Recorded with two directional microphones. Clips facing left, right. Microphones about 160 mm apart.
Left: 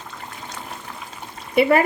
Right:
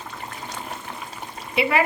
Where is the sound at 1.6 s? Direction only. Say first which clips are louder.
Left 5 dB; 50° left (ahead or behind).